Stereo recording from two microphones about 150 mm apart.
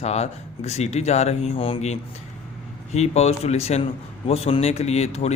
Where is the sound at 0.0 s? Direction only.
45° left (ahead or behind).